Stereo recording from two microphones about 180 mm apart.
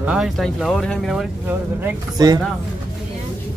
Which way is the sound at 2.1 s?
20° right (ahead or behind).